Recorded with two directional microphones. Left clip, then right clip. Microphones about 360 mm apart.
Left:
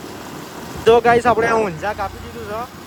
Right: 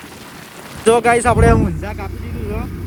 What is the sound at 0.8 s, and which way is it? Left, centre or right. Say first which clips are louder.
Speech: even; centre.